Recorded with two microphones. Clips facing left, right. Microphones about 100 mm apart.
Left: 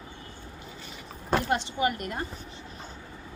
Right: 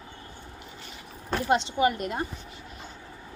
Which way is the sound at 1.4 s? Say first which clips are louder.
Right 4 dB; 20° right (ahead or behind).